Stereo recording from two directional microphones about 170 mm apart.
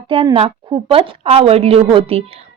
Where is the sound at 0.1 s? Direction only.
30° right (ahead or behind).